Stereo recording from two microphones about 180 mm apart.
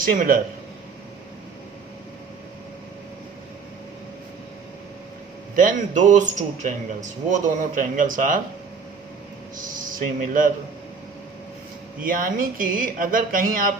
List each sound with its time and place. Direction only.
0.0 s speech: 50° right (ahead or behind)
5.5 s speech: 45° right (ahead or behind)
9.6 s speech: 45° right (ahead or behind)
12.0 s speech: 50° right (ahead or behind)